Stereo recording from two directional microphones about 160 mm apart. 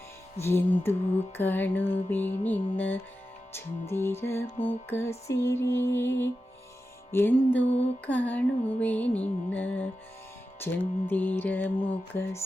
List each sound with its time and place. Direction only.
0.3 s music: 15° left (ahead or behind)